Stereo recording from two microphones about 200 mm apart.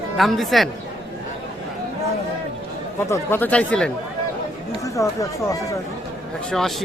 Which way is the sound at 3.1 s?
10° left (ahead or behind).